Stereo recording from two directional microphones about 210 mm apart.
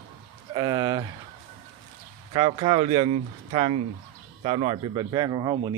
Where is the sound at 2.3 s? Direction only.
25° right (ahead or behind).